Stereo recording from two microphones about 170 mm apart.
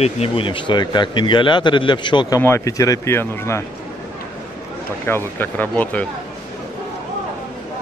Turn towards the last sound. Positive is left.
turn(degrees=10)  # may be behind; listen again after turning